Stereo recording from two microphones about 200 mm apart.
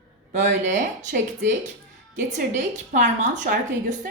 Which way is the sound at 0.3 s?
35° right (ahead or behind).